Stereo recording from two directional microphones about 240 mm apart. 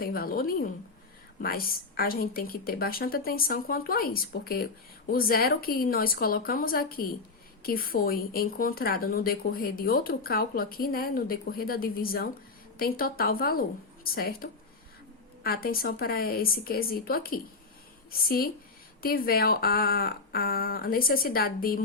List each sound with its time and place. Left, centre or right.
0.0 s speech: left